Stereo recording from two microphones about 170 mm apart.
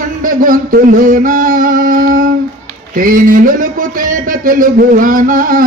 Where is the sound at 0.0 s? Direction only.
55° right (ahead or behind).